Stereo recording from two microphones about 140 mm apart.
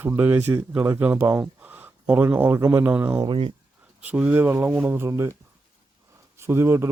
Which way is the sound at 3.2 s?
40° right (ahead or behind).